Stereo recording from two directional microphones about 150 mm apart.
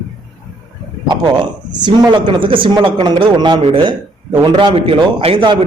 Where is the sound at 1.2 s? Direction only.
30° right (ahead or behind).